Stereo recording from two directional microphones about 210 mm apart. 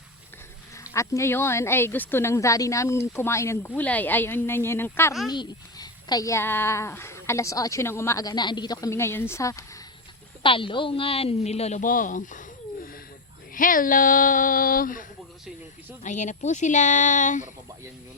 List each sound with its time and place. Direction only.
0.9 s a child's voice: 15° left (ahead or behind); by 15.0 s 40° left (ahead or behind)
16.0 s speech: 35° left (ahead or behind)